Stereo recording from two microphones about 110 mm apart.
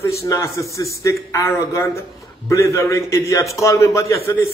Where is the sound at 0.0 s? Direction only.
25° left (ahead or behind).